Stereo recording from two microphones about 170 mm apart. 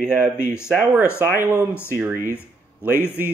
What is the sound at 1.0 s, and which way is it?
Speech, 15° left (ahead or behind).